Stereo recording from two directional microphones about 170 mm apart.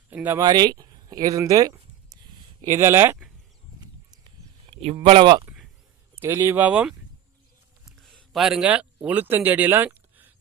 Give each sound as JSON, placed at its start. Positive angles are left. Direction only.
{"t": 0.1, "sound": "speech", "side_deg": -10}
{"t": 0.4, "sound": "speech", "side_deg": -25}
{"t": 4.7, "sound": "a sound", "side_deg": -40}
{"t": 4.9, "sound": "speech", "side_deg": -30}
{"t": 6.1, "sound": "speech", "side_deg": -15}
{"t": 7.9, "sound": "a sound", "side_deg": 0}
{"t": 9.0, "sound": "speech", "side_deg": -10}